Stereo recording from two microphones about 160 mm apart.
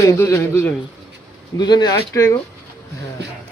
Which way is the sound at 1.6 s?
25° left (ahead or behind).